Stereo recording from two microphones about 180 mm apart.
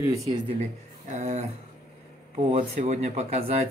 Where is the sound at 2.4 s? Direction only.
35° right (ahead or behind).